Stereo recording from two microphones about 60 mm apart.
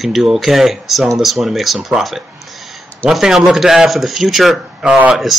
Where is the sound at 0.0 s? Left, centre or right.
Centre.